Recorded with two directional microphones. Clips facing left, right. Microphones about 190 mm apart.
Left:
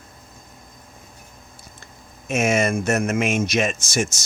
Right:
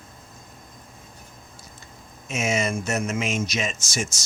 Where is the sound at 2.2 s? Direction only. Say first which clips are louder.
Left 5 dB; 55° left (ahead or behind).